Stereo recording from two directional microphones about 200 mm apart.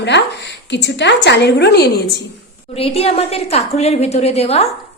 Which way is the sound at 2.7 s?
30° left (ahead or behind).